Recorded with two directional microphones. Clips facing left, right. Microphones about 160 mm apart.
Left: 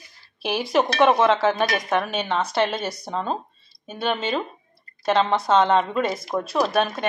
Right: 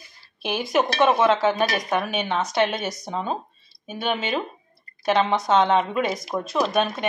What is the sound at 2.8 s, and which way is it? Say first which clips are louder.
Speech: even; 30° left (ahead or behind).